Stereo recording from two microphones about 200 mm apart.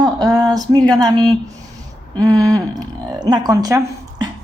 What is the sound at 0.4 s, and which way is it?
Speech, 20° right (ahead or behind).